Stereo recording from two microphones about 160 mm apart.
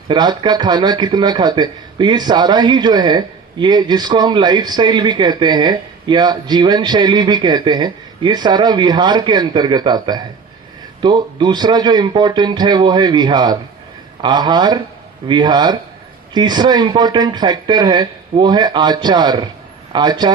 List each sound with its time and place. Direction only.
0.1 s speech: 25° right (ahead or behind)